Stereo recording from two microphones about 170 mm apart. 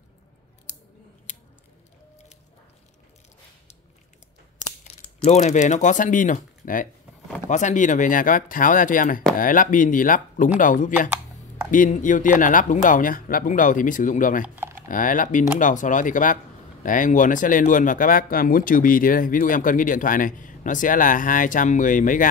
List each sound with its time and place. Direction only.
5.2 s speech: 45° left (ahead or behind)
14.4 s speech: 10° right (ahead or behind)
14.9 s speech: 50° left (ahead or behind)